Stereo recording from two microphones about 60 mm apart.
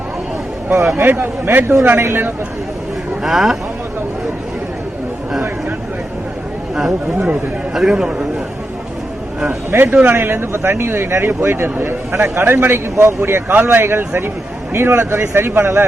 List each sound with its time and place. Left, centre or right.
0.7 s speech: right
1.0 s speech: right
3.2 s speech: centre
6.7 s speech: centre
10.0 s speech: right